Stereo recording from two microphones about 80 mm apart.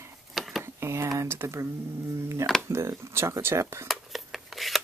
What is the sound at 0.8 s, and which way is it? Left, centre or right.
Speech, right.